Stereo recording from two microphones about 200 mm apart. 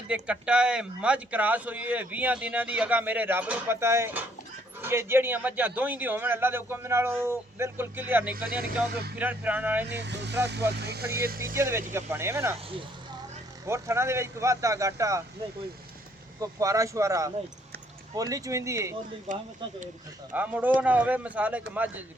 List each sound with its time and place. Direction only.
0.1 s speech: 5° right (ahead or behind)
9.9 s speech: 60° right (ahead or behind)
11.5 s speech: 10° right (ahead or behind)
13.7 s speech: 15° right (ahead or behind)
16.4 s speech: 15° right (ahead or behind)
19.3 s speech: 40° right (ahead or behind)
20.3 s speech: 10° right (ahead or behind)